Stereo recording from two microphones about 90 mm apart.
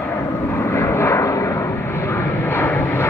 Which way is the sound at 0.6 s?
30° left (ahead or behind).